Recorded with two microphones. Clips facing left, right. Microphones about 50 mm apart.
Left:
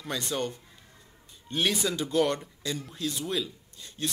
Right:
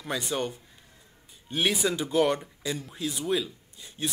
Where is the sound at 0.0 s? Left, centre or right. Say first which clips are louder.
Right 1 dB; centre.